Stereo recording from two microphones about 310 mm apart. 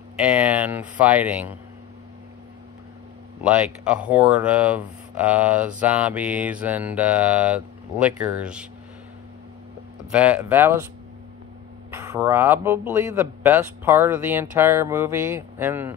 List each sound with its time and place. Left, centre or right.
0.3 s speech: centre
3.4 s speech: centre
10.1 s speech: centre
12.0 s speech: centre